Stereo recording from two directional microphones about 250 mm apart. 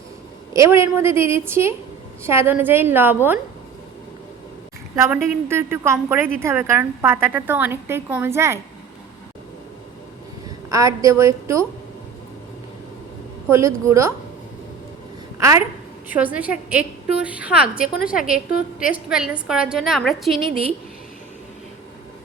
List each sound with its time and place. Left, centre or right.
0.5 s a woman's voice: centre
4.9 s a woman's voice: centre
10.7 s a woman's voice: centre
13.5 s a woman's voice: centre
15.4 s a woman's voice: centre
17.9 s a woman's voice: left
19.0 s a woman's voice: centre
20.3 s a woman's voice: right